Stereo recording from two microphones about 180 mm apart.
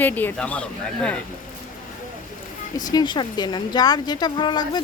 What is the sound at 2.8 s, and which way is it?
A woman's voice, 20° left (ahead or behind).